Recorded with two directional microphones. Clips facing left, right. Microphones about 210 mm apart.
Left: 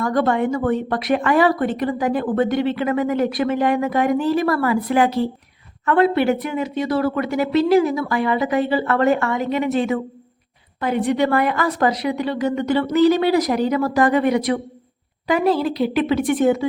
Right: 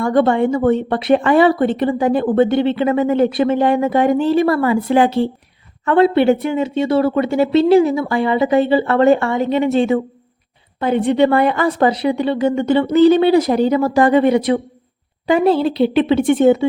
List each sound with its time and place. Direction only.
0.0 s a woman's voice: 25° right (ahead or behind)